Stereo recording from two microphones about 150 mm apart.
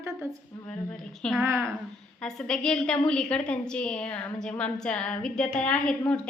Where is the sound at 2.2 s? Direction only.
5° left (ahead or behind).